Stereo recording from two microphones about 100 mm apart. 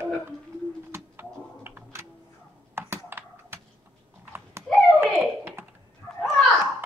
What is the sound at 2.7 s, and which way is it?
Computer keyboard, 25° right (ahead or behind).